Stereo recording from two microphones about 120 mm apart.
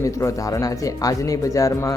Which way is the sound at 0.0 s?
25° left (ahead or behind).